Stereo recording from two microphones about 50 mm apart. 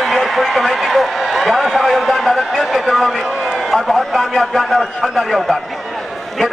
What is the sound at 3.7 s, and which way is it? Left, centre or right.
A man's voice, centre.